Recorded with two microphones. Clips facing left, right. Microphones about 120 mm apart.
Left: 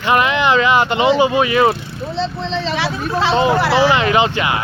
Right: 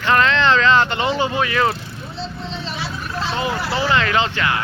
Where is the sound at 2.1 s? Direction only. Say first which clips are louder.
Left 9 dB; 85° left.